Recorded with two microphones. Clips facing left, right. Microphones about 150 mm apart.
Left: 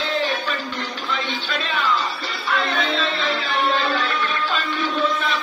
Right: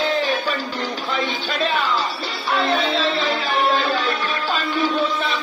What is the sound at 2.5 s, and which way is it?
Music, 35° right (ahead or behind).